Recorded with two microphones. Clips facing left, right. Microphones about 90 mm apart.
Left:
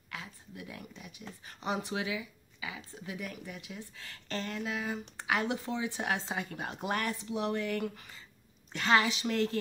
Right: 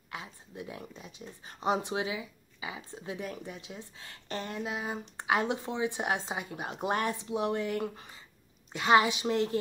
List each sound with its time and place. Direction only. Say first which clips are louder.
0.1 s speech: right 2 dB; 25° right (ahead or behind)